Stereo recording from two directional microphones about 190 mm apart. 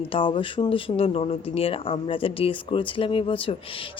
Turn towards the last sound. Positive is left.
turn(degrees=30)  # may be behind; listen again after turning